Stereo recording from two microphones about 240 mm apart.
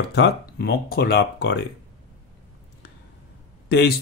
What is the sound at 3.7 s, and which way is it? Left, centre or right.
Speech, left.